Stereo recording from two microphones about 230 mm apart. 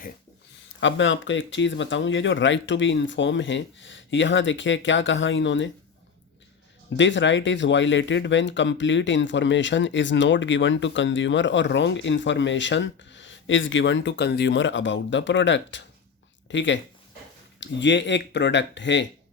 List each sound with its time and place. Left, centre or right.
0.8 s speech: left
6.9 s speech: left